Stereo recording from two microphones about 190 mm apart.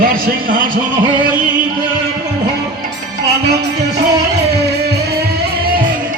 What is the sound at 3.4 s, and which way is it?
Music, 60° right (ahead or behind).